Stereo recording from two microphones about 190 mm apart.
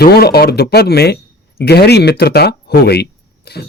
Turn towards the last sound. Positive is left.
turn(degrees=55)  # may be behind; listen again after turning